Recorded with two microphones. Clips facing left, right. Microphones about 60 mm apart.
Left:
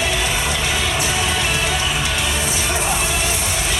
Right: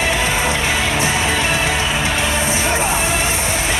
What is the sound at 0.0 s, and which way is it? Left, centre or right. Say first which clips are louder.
Music: right 3 dB; right.